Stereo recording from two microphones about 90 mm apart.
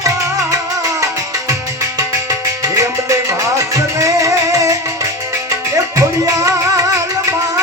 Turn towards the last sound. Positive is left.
turn(degrees=-35)  # may be behind; listen again after turning